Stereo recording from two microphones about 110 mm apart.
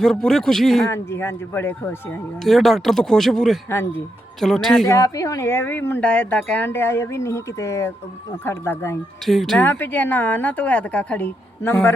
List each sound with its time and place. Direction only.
0.0 s speech: 5° left (ahead or behind)
0.9 s speech: 25° left (ahead or behind)
2.4 s speech: centre (ahead or behind)
3.7 s speech: 20° left (ahead or behind)
4.4 s speech: centre (ahead or behind)
4.9 s speech: 30° left (ahead or behind)
9.2 s speech: centre (ahead or behind)
9.6 s speech: 15° left (ahead or behind)